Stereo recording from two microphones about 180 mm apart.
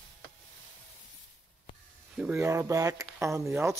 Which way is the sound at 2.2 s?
15° right (ahead or behind).